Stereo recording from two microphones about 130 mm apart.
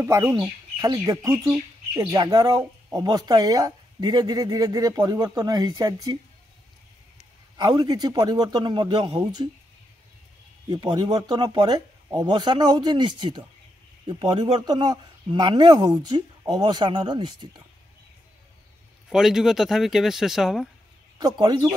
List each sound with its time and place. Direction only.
0.0 s speech: 20° right (ahead or behind)
7.5 s speech: 35° right (ahead or behind)
10.7 s speech: 35° right (ahead or behind)
19.0 s speech: 5° right (ahead or behind)
21.2 s speech: 35° right (ahead or behind)